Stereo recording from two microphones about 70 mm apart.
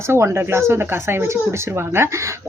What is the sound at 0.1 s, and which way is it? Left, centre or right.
Speech, right.